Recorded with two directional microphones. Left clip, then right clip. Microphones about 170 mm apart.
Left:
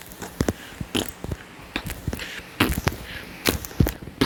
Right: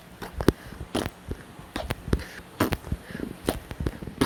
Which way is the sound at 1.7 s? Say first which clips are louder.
Even; centre (ahead or behind).